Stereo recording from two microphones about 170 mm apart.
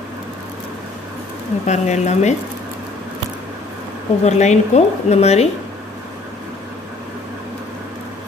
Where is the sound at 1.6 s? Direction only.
40° left (ahead or behind).